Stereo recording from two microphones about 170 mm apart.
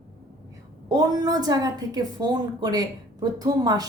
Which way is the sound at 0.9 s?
20° right (ahead or behind).